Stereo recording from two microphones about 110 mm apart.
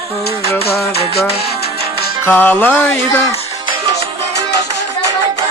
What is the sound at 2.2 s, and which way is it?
Music, 15° left (ahead or behind).